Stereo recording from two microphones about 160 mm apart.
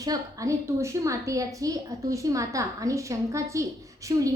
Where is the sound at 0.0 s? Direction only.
20° right (ahead or behind).